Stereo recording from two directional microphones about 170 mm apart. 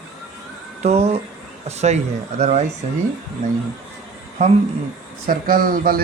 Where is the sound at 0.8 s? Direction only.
40° right (ahead or behind).